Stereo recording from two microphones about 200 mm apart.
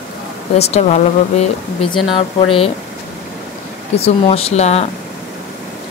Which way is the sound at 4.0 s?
30° left (ahead or behind).